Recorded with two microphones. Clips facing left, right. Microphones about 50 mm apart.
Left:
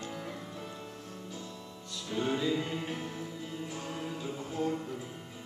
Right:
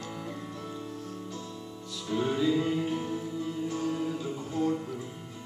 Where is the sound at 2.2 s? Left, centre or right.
Centre.